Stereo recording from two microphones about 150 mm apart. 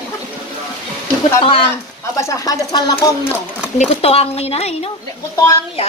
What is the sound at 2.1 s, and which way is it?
Speech, 20° left (ahead or behind).